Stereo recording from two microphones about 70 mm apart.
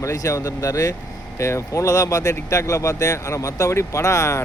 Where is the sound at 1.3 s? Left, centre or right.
Left.